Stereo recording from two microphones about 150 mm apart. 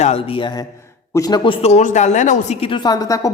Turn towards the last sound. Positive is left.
turn(degrees=25)  # may be behind; listen again after turning